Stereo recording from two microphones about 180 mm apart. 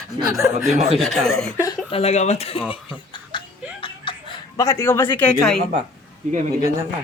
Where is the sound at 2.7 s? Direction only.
25° left (ahead or behind).